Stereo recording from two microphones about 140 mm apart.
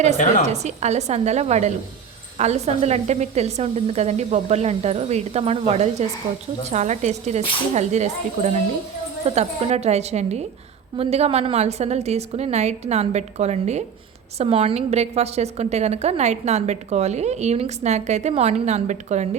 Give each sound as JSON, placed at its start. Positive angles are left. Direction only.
{"t": 0.4, "sound": "a woman's voice", "side_deg": -55}